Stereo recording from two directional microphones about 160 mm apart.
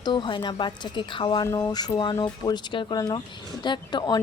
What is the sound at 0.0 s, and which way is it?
Speech, 30° left (ahead or behind).